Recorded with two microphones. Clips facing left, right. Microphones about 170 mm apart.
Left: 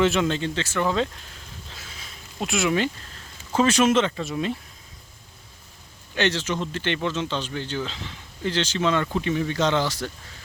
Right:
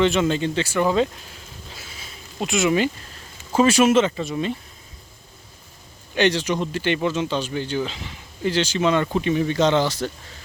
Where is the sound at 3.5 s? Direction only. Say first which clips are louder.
Right 3 dB; 10° right (ahead or behind).